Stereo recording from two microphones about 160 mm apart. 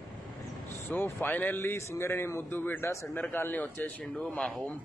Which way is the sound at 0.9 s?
15° left (ahead or behind).